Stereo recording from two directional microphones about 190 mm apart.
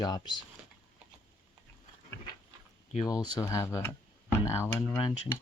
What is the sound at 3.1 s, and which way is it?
Speech, 20° left (ahead or behind).